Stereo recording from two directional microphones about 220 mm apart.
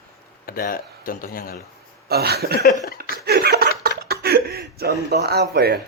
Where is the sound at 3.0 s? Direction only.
45° right (ahead or behind).